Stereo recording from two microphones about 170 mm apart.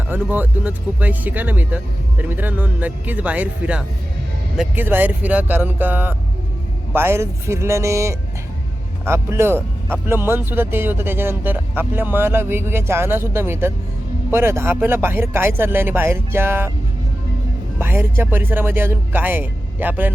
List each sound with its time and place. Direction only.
0.1 s speech: 10° right (ahead or behind)
17.7 s speech: 15° right (ahead or behind)